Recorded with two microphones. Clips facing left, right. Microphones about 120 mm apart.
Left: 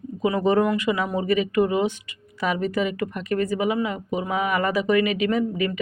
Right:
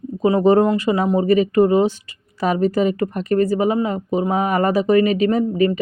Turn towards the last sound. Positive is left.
turn(degrees=-35)  # may be behind; listen again after turning